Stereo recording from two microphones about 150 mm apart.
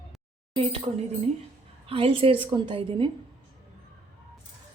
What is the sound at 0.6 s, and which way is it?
Speech, 40° right (ahead or behind).